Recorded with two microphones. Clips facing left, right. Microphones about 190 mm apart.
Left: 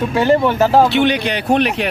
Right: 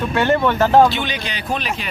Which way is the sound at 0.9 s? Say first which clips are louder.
Left 10 dB; 65° left (ahead or behind).